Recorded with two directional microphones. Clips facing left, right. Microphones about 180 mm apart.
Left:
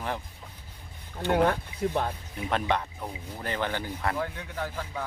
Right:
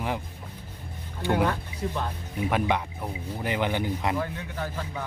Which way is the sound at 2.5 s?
10° right (ahead or behind).